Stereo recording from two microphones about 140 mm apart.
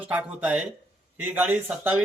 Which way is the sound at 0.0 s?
10° right (ahead or behind).